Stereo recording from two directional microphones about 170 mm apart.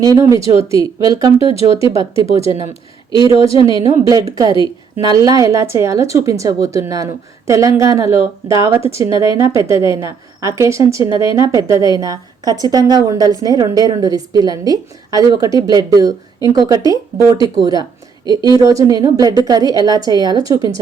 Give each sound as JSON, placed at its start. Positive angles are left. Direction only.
{"t": 0.0, "sound": "a woman's voice", "side_deg": -20}
{"t": 1.4, "sound": "speech", "side_deg": 30}
{"t": 3.9, "sound": "a woman's voice", "side_deg": -20}